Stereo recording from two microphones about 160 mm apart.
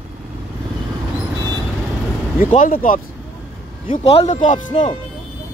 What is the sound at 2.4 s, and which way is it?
Speech, 55° left (ahead or behind).